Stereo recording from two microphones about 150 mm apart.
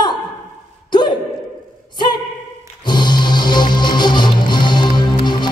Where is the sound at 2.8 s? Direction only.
30° left (ahead or behind).